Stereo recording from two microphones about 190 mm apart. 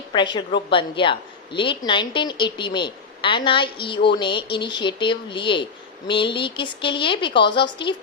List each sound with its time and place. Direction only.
0.1 s a woman's voice: 25° left (ahead or behind)